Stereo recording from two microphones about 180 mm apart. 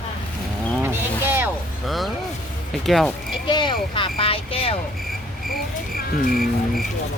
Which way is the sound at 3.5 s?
25° left (ahead or behind).